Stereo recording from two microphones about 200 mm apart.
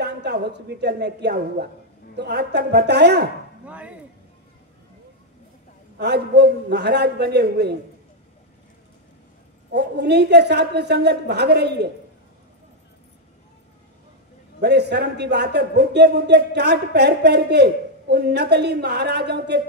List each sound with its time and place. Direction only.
0.0 s a man's voice: 55° right (ahead or behind)
3.6 s speech: 5° right (ahead or behind)
5.9 s a man's voice: 55° right (ahead or behind)
9.7 s a man's voice: 55° right (ahead or behind)
14.6 s a man's voice: 55° right (ahead or behind)